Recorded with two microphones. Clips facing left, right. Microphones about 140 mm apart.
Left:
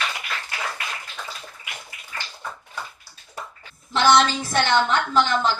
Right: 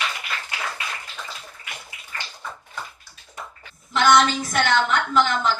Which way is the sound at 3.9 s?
30° left (ahead or behind).